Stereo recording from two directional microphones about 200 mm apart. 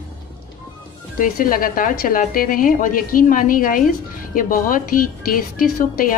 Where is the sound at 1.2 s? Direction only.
45° left (ahead or behind).